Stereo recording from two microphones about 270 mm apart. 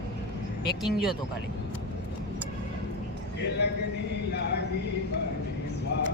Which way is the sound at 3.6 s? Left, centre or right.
Left.